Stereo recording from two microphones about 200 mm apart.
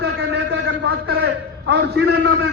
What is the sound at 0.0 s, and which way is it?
A man's voice, 55° right (ahead or behind).